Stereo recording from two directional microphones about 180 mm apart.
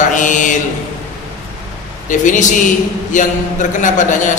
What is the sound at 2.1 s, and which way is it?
A man's voice, 45° left (ahead or behind).